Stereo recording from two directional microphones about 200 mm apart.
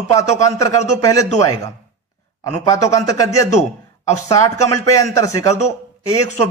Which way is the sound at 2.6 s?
15° left (ahead or behind).